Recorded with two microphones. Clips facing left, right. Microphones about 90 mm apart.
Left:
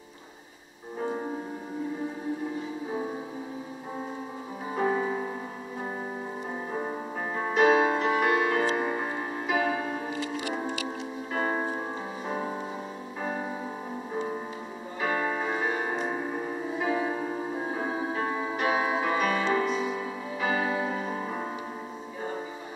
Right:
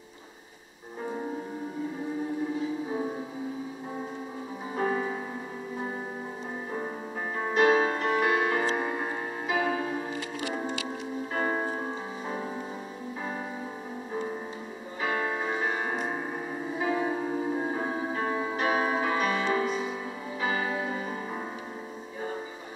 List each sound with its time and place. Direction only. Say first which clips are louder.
4.7 s music: left 2 dB; 5° left (ahead or behind)
7.3 s music: left 1 dB; centre (ahead or behind)
12.3 s music: left 3 dB; 15° left (ahead or behind)
15.0 s music: left 1 dB; centre (ahead or behind)